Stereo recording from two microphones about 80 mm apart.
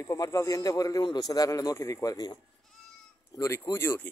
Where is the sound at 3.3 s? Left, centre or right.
Left.